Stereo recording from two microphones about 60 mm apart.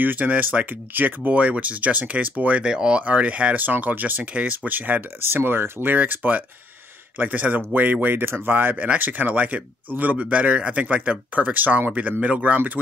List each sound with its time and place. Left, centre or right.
0.0 s a man's voice: right
2.7 s a man's voice: centre